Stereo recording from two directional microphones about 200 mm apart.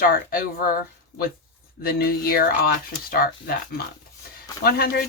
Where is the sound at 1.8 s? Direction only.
50° left (ahead or behind).